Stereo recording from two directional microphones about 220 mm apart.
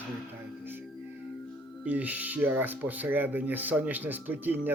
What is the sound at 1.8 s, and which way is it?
Speech, 5° right (ahead or behind).